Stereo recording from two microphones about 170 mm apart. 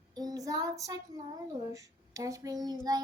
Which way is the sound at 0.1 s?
25° right (ahead or behind).